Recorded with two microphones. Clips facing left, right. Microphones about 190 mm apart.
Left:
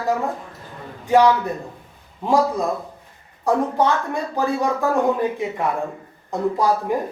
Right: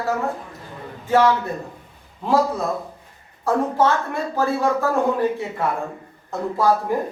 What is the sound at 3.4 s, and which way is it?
A man's voice, 15° left (ahead or behind).